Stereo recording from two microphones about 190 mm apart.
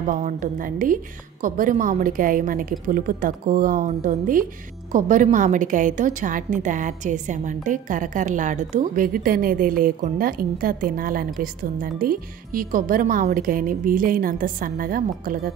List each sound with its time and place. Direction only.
0.2 s a woman's voice: 45° right (ahead or behind)